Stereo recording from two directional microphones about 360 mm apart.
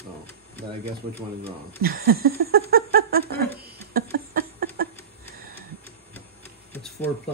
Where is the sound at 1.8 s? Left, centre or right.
Right.